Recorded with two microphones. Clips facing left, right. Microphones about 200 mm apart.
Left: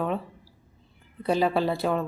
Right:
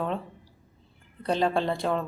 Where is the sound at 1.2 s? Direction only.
5° left (ahead or behind).